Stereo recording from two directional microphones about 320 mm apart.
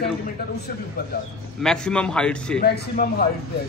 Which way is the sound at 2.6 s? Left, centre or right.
Left.